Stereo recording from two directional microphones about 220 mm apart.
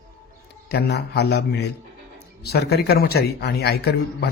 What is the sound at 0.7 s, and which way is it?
A man's voice, 50° left (ahead or behind).